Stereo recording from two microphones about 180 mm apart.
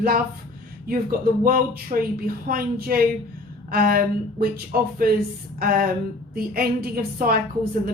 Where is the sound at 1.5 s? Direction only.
55° right (ahead or behind).